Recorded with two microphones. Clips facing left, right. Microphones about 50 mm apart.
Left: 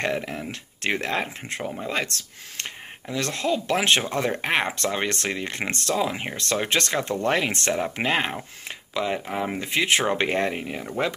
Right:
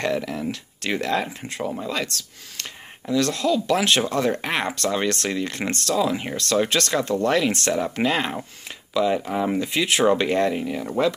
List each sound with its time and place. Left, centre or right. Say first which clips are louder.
0.0 s speech: right 2 dB; left
9.7 s speech: right 2 dB; left